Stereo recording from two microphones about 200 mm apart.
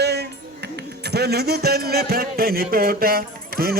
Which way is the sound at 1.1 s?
55° right (ahead or behind).